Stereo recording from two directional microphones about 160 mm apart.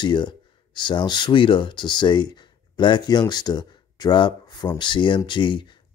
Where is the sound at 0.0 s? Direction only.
30° left (ahead or behind).